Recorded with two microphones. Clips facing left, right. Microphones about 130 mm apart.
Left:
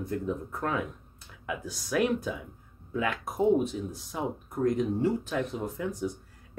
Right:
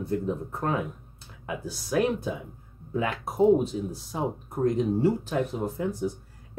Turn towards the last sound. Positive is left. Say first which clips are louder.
# right 4 dB
turn(degrees=-30)  # may be behind; listen again after turning